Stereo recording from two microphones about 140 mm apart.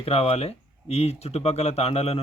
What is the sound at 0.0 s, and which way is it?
Speech, 45° left (ahead or behind).